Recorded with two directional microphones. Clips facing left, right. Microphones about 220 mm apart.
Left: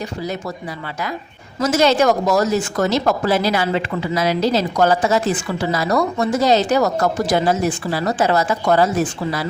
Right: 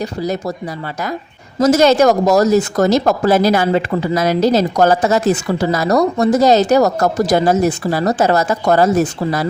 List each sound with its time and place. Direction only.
0.2 s speech: 40° right (ahead or behind)
1.5 s speech: 40° right (ahead or behind)